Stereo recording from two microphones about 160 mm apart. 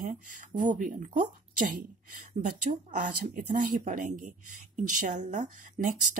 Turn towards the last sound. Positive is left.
turn(degrees=-55)  # may be behind; listen again after turning